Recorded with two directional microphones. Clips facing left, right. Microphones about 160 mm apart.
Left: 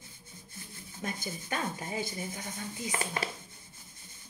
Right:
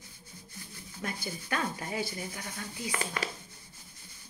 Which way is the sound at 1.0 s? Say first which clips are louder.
Even; 30° left (ahead or behind).